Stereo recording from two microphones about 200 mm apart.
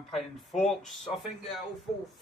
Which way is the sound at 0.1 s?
Centre (ahead or behind).